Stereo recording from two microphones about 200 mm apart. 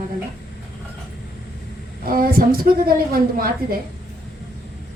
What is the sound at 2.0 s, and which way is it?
A woman's voice, 45° right (ahead or behind).